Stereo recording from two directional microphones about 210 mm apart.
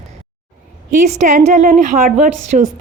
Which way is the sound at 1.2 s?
35° right (ahead or behind).